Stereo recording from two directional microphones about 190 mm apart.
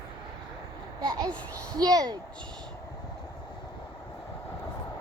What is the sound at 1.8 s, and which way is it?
Speech, 20° right (ahead or behind).